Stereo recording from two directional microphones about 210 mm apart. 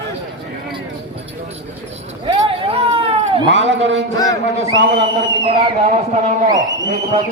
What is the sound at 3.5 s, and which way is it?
Speech, 60° right (ahead or behind).